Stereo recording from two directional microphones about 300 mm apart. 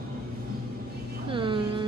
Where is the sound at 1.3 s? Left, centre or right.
Centre.